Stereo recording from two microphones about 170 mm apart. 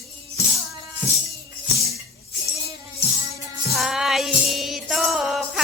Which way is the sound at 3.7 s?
Centre (ahead or behind).